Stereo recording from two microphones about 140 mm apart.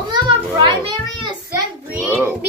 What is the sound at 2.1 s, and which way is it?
Speech, 15° right (ahead or behind).